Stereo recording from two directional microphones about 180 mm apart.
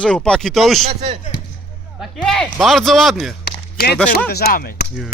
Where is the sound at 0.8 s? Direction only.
35° right (ahead or behind).